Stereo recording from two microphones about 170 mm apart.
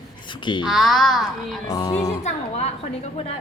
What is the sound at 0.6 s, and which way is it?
Speech, centre (ahead or behind).